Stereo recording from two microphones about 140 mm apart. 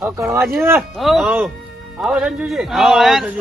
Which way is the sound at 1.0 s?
Centre (ahead or behind).